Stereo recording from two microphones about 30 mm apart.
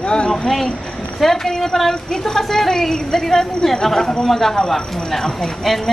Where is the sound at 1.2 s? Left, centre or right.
Centre.